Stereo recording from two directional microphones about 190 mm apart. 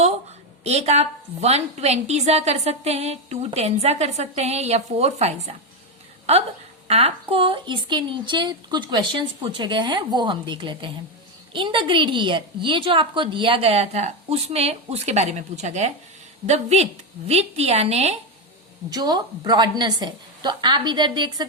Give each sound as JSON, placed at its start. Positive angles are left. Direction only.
{"t": 0.6, "sound": "a woman's voice", "side_deg": -35}
{"t": 18.9, "sound": "a woman's voice", "side_deg": -20}